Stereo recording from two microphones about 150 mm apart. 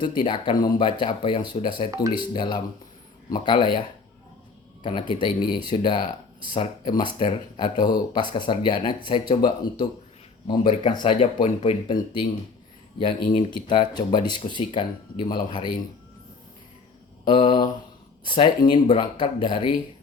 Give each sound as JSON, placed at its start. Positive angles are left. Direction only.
{"t": 0.0, "sound": "speech", "side_deg": 30}
{"t": 13.5, "sound": "speech", "side_deg": 30}
{"t": 17.2, "sound": "speech", "side_deg": 30}